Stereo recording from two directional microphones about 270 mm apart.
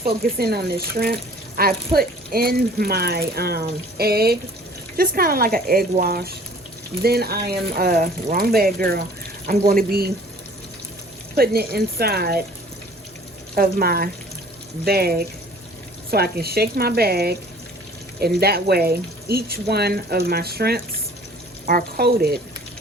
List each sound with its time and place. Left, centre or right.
0.0 s speech: right
11.3 s speech: right
13.6 s speech: right